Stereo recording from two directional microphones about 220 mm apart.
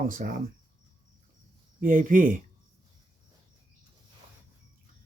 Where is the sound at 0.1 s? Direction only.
40° right (ahead or behind).